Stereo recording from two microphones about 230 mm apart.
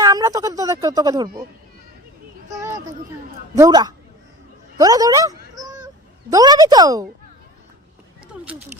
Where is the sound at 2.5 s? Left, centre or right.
Centre.